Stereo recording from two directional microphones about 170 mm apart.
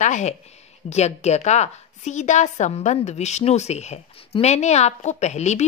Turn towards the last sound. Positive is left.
turn(degrees=40)  # may be behind; listen again after turning